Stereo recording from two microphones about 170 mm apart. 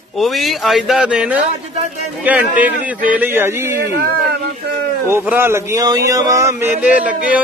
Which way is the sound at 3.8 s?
65° right (ahead or behind).